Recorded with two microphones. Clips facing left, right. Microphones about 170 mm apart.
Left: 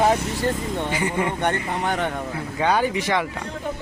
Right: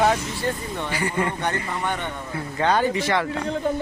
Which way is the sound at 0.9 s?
15° left (ahead or behind).